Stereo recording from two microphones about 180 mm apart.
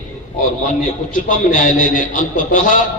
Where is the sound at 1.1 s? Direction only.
50° left (ahead or behind).